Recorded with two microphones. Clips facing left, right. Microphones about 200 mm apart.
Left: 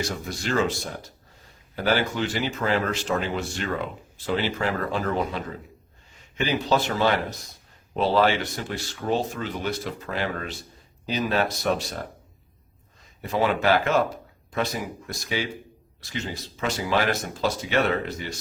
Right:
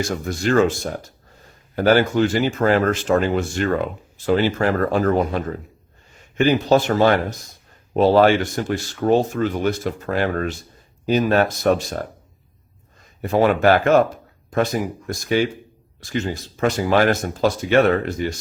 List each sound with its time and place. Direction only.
0.0 s speech: 50° right (ahead or behind)
13.2 s speech: 50° right (ahead or behind)